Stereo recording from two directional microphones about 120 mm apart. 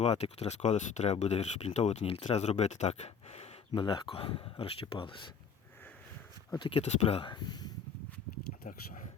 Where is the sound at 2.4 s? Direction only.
70° left (ahead or behind).